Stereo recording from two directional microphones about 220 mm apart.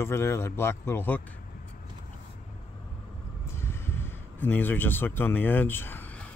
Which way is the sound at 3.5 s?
10° left (ahead or behind).